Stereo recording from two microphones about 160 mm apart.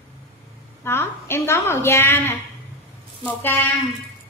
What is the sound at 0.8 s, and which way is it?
A woman's voice, 15° left (ahead or behind).